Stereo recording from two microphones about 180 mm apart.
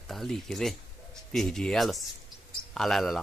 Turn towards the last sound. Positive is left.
turn(degrees=0)  # may be behind; listen again after turning